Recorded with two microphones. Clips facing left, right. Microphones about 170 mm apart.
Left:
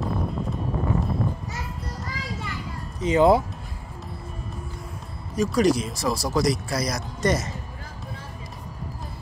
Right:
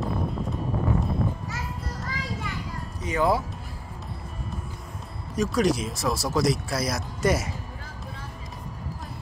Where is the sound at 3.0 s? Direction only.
20° left (ahead or behind).